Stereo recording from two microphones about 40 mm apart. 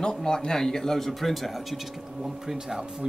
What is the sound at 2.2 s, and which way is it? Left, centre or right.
Speech, centre.